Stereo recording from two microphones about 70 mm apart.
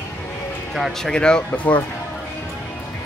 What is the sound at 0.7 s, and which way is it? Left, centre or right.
Speech, centre.